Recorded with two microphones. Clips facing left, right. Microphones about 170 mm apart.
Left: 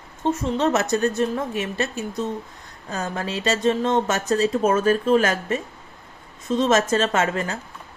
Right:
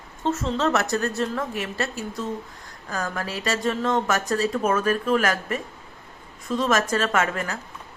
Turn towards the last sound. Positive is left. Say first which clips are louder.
# left 2 dB
turn(degrees=30)  # may be behind; listen again after turning